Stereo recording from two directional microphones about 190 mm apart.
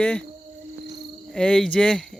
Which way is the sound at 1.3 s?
5° left (ahead or behind).